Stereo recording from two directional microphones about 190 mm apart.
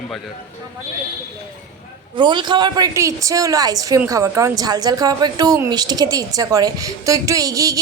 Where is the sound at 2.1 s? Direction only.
25° right (ahead or behind).